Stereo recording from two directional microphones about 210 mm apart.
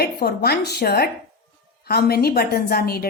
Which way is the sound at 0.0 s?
50° left (ahead or behind).